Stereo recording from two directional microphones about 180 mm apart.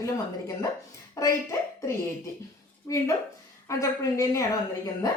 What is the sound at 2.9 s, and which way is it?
A woman's voice, 15° left (ahead or behind).